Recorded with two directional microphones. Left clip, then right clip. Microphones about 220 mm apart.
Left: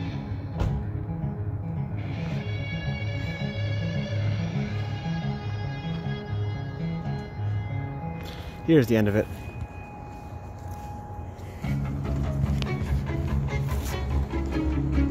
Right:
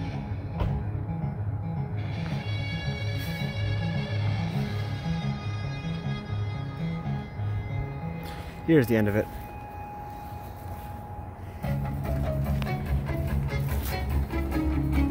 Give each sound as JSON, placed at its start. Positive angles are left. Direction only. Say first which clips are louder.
{"t": 2.0, "sound": "music", "louder": "left 2 dB", "side_deg": -45}
{"t": 8.6, "sound": "speech", "louder": "left 1 dB", "side_deg": 5}
{"t": 11.6, "sound": "music", "louder": "even", "side_deg": -30}